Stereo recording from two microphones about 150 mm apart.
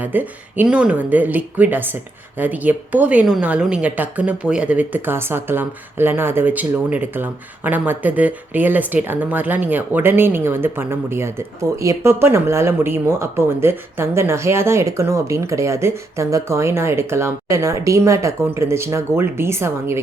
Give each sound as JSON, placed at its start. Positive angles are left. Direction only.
{"t": 0.0, "sound": "a woman's voice", "side_deg": -10}